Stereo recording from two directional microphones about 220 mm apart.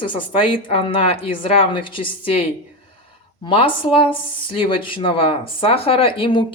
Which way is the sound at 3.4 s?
25° left (ahead or behind).